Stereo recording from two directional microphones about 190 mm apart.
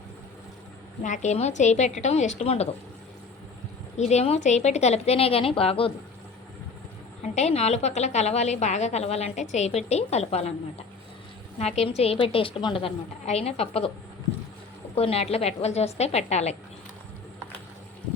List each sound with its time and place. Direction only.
1.0 s a woman's voice: 40° left (ahead or behind)
3.9 s a woman's voice: 35° left (ahead or behind)
7.3 s a woman's voice: 35° left (ahead or behind)
11.6 s a woman's voice: 35° left (ahead or behind)
14.9 s a woman's voice: 30° left (ahead or behind)